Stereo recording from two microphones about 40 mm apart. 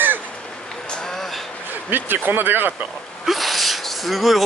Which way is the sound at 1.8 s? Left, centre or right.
Right.